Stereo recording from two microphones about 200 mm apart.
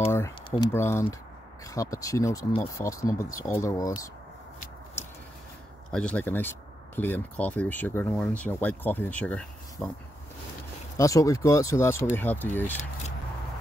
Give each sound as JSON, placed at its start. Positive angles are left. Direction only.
{"t": 0.1, "sound": "speech", "side_deg": 15}
{"t": 5.9, "sound": "speech", "side_deg": 5}
{"t": 11.0, "sound": "speech", "side_deg": 15}